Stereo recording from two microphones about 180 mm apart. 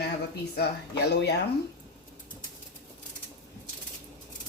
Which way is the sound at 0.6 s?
70° left (ahead or behind).